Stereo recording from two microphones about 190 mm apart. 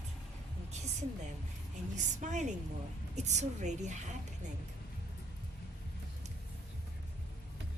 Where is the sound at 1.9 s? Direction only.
40° right (ahead or behind).